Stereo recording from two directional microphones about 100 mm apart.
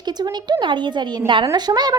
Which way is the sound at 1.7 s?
40° right (ahead or behind).